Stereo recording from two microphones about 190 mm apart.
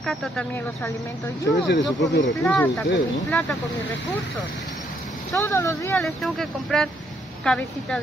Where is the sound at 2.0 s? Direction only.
80° left.